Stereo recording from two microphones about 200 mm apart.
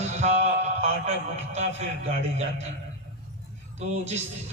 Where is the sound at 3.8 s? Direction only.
35° right (ahead or behind).